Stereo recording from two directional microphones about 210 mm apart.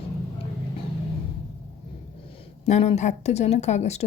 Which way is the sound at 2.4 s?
30° left (ahead or behind).